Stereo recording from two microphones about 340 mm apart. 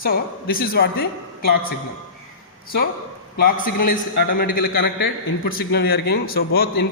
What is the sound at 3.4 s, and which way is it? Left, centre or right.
A woman's voice, left.